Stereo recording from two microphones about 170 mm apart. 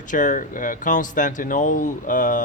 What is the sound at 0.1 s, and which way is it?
Speech, 50° left (ahead or behind).